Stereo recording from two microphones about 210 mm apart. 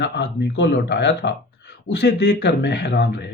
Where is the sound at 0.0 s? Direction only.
55° left (ahead or behind).